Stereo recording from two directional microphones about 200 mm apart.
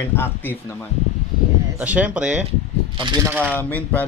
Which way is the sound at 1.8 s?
5° right (ahead or behind).